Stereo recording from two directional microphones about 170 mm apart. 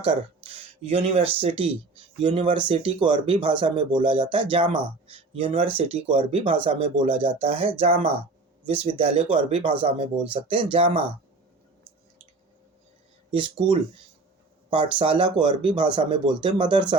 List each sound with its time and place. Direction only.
0.0 s speech: 35° right (ahead or behind)
13.3 s speech: 30° right (ahead or behind)